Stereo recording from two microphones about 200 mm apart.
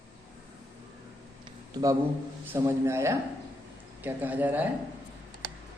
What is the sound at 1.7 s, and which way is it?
A man's voice, 15° right (ahead or behind).